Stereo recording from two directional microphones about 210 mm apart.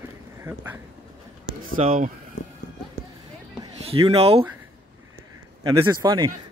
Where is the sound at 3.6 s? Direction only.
25° right (ahead or behind).